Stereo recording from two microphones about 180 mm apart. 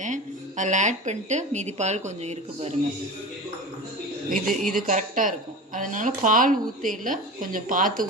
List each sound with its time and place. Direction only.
0.0 s speech: 45° right (ahead or behind)
4.4 s a woman's voice: 50° right (ahead or behind)